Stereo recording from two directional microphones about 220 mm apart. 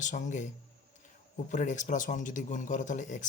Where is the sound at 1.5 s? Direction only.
35° left (ahead or behind).